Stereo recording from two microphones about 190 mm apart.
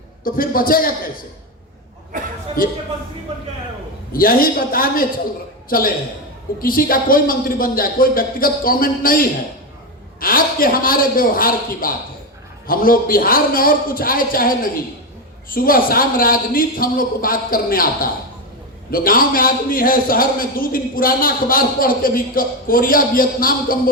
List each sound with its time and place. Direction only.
0.3 s a man's voice: 50° left (ahead or behind)
2.6 s a man's voice: 50° left (ahead or behind)
4.1 s a man's voice: 50° left (ahead or behind)